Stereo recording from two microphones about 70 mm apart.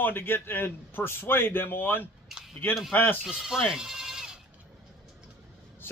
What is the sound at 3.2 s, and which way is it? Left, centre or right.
Speech, centre.